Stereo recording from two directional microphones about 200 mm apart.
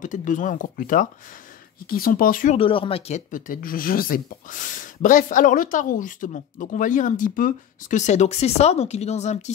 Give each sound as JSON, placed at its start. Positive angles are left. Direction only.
{"t": 0.0, "sound": "speech", "side_deg": 40}
{"t": 2.5, "sound": "speech", "side_deg": 25}